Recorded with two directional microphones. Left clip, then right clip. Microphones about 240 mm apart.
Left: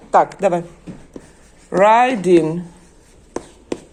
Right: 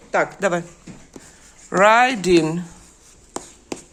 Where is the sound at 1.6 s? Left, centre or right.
Right.